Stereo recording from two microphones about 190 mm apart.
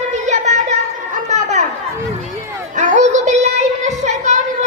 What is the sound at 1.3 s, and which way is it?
Chatter, 35° right (ahead or behind).